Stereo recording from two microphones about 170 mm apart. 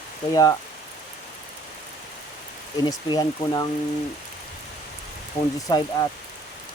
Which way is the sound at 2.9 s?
25° left (ahead or behind).